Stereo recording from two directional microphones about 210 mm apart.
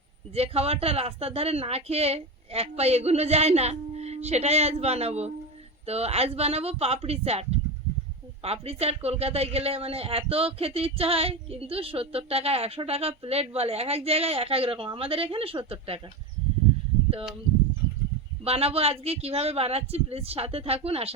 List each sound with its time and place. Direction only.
0.3 s speech: 30° right (ahead or behind)
18.4 s speech: 30° right (ahead or behind)